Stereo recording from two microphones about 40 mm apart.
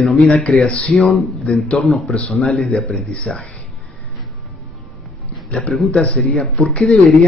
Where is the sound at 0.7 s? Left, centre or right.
Left.